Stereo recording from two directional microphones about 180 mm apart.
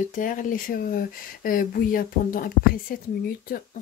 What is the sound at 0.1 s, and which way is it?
Speech, 50° left (ahead or behind).